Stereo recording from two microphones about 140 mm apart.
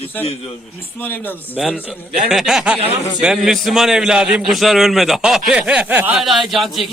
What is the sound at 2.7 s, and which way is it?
Speech, 45° right (ahead or behind).